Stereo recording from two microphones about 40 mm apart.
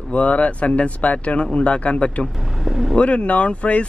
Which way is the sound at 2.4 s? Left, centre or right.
Centre.